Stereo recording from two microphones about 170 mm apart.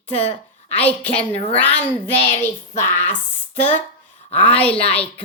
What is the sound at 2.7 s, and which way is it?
Speech, 45° left (ahead or behind).